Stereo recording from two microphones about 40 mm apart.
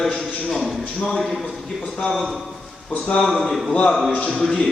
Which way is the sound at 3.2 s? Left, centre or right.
Centre.